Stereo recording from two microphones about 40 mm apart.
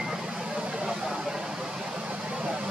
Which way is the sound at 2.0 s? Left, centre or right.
Right.